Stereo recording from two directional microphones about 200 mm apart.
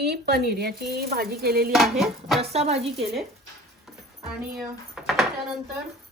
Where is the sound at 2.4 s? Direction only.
30° right (ahead or behind).